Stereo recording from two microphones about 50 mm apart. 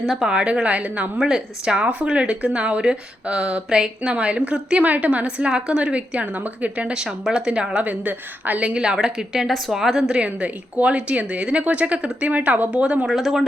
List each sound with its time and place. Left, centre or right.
0.1 s speech: centre; by 1.1 s right
1.2 s speech: centre
4.8 s speech: right
7.8 s a woman's voice: right; by 9.5 s centre
9.5 s a woman's voice: centre
10.2 s speech: right
12.7 s speech: right
13.1 s speech: centre